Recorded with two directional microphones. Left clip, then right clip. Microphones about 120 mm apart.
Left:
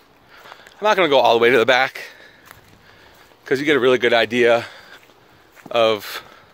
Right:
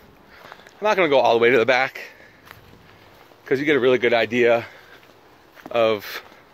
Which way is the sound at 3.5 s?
40° left (ahead or behind).